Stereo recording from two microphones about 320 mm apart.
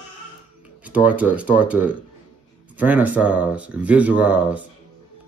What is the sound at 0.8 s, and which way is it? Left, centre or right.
Speech, centre.